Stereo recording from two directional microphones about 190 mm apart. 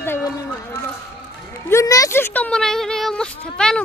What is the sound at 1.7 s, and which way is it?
Speech, 15° left (ahead or behind).